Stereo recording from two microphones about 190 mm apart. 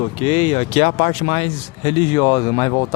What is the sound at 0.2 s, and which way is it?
Speech, 30° left (ahead or behind).